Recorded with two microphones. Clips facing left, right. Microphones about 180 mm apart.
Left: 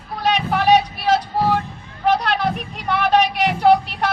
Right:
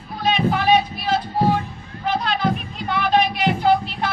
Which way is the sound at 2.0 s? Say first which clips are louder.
Left 3 dB; 75° left (ahead or behind).